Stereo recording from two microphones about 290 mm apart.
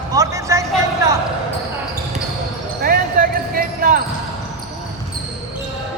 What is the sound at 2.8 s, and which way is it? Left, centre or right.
Basketball bounce, right.